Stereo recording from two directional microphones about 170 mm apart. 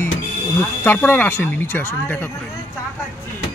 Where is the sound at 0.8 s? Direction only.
10° left (ahead or behind).